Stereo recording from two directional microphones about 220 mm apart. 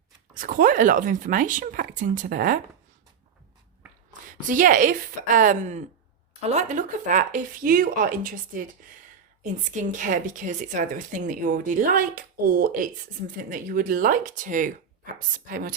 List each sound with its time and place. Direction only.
0.3 s a woman's voice: 35° right (ahead or behind)
4.3 s a woman's voice: 35° right (ahead or behind)